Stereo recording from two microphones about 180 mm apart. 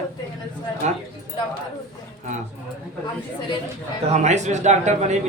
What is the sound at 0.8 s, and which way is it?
Speech, 40° right (ahead or behind).